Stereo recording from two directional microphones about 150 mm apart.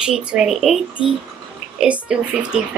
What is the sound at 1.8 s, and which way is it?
Speech, 5° right (ahead or behind).